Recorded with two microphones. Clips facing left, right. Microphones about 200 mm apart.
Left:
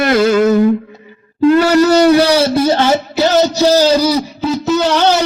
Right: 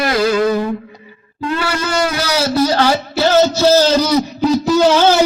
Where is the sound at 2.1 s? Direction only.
30° left (ahead or behind); by 4.5 s 10° left (ahead or behind).